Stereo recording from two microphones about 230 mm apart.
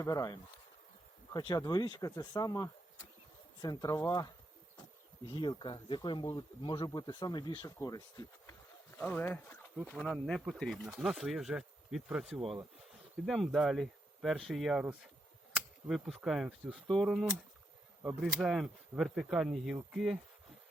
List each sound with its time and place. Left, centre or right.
0.0 s speech: centre
5.3 s speech: left; by 20.1 s centre